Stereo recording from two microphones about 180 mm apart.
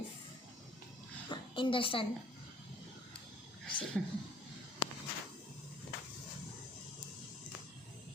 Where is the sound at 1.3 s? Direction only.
25° left (ahead or behind).